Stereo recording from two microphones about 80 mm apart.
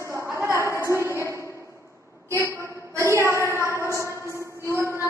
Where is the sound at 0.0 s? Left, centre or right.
Right.